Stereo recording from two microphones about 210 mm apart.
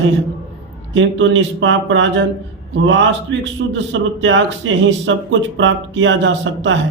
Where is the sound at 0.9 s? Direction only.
60° right (ahead or behind).